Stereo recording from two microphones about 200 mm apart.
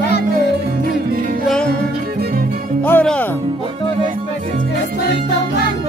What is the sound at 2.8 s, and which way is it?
Speech, 10° left (ahead or behind).